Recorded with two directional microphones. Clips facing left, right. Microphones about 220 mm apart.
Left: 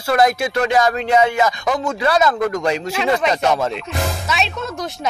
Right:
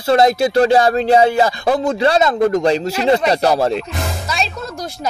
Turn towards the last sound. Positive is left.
turn(degrees=0)  # may be behind; listen again after turning